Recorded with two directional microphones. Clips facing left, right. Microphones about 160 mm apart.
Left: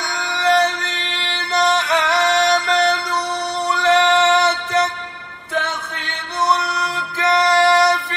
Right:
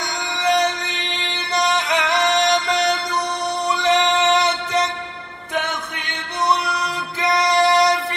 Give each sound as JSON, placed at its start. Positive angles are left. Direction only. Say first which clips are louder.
{"t": 0.3, "sound": "music", "louder": "left 2 dB", "side_deg": -20}
{"t": 7.2, "sound": "music", "louder": "left 2 dB", "side_deg": -15}